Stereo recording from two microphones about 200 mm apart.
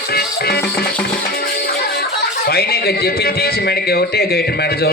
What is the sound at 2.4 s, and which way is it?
A man's voice, 50° left (ahead or behind).